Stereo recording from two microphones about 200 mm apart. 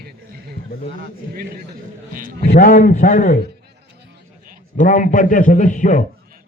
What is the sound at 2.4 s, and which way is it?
Speech, 40° left (ahead or behind).